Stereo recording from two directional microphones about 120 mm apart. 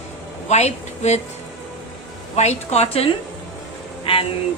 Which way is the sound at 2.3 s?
65° left (ahead or behind).